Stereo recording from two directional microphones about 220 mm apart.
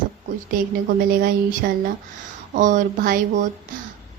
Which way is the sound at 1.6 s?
45° right (ahead or behind).